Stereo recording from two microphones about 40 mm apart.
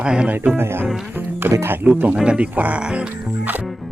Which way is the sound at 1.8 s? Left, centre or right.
Right.